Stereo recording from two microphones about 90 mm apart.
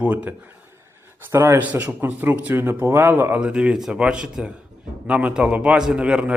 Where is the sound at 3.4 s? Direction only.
10° right (ahead or behind).